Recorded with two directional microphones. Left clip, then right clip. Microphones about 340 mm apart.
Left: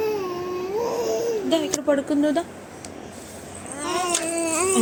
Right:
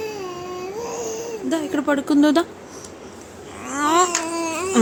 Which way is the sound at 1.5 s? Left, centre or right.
Centre.